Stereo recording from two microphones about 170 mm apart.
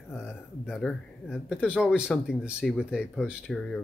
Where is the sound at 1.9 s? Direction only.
5° right (ahead or behind).